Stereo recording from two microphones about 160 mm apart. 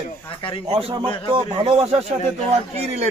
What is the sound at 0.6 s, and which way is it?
Speech, 40° right (ahead or behind).